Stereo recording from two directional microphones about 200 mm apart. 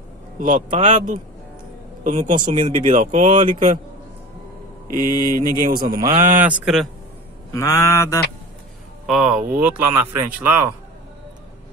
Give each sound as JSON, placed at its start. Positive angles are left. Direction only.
{"t": 0.4, "sound": "speech", "side_deg": -40}
{"t": 4.9, "sound": "speech", "side_deg": -45}
{"t": 6.3, "sound": "speech", "side_deg": -5}
{"t": 7.5, "sound": "mantra", "side_deg": 15}
{"t": 9.0, "sound": "speech", "side_deg": -5}